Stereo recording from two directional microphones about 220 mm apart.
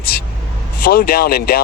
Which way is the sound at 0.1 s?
45° left (ahead or behind).